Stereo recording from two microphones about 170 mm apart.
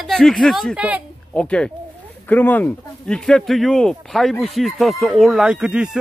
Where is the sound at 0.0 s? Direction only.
Centre (ahead or behind).